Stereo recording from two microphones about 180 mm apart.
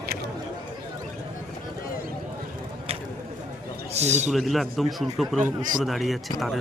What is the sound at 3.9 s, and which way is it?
Speech, 40° right (ahead or behind).